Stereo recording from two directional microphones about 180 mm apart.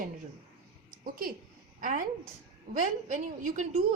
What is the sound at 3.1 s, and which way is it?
Speech, 45° right (ahead or behind).